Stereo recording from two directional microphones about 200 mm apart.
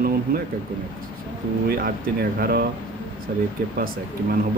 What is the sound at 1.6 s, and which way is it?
Speech, 50° right (ahead or behind).